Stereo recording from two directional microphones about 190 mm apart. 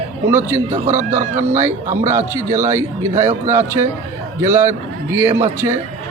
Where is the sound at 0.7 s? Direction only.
40° right (ahead or behind).